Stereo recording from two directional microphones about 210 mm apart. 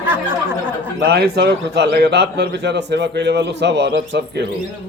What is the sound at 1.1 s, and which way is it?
A man's voice, 50° right (ahead or behind).